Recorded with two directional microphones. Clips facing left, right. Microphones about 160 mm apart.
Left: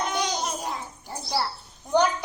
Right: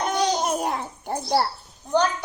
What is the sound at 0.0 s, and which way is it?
Babbling, 50° right (ahead or behind).